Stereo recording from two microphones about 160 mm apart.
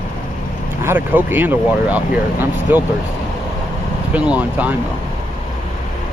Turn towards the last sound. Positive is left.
turn(degrees=-10)  # may be behind; listen again after turning